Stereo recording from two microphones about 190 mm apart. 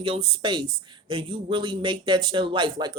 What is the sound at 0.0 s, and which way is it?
Speech, 25° right (ahead or behind).